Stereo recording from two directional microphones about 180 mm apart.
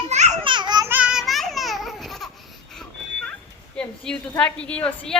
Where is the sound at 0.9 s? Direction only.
5° right (ahead or behind).